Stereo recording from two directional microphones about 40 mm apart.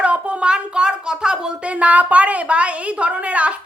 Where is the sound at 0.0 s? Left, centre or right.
Right.